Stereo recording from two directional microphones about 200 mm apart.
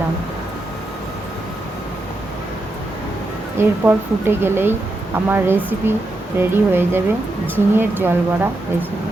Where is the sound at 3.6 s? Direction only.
10° right (ahead or behind).